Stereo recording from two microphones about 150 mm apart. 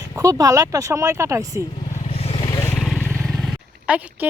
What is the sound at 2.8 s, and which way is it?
Roaring cats, centre (ahead or behind).